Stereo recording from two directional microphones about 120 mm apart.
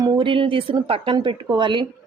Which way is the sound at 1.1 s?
40° right (ahead or behind).